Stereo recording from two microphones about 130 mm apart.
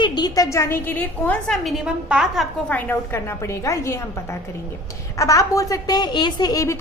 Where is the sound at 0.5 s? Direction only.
20° left (ahead or behind).